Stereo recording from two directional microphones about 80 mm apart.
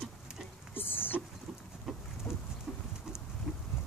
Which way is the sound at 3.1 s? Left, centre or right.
Centre.